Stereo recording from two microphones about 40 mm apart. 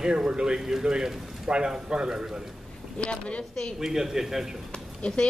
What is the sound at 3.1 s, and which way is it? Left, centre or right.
Speech, left.